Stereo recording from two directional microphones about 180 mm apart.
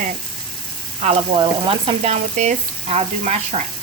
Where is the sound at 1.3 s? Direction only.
30° right (ahead or behind).